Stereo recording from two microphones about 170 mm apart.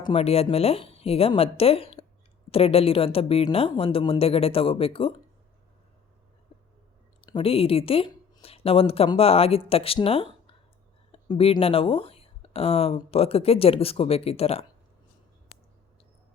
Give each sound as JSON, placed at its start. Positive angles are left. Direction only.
{"t": 0.0, "sound": "speech", "side_deg": 35}
{"t": 7.3, "sound": "speech", "side_deg": 30}